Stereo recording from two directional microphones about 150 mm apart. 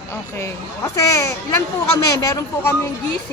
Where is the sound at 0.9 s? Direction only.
20° left (ahead or behind).